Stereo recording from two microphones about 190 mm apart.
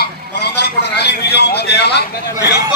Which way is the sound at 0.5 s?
60° left (ahead or behind).